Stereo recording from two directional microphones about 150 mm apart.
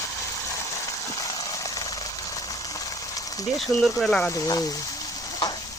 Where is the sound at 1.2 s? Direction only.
25° left (ahead or behind).